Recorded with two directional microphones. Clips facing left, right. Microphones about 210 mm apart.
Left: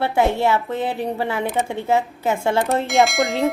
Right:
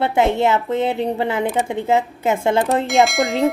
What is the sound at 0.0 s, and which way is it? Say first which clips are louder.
A woman's voice: right 2 dB; 15° right (ahead or behind).